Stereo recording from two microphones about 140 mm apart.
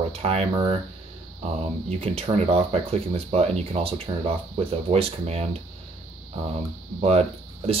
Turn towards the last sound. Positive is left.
turn(degrees=-50)  # may be behind; listen again after turning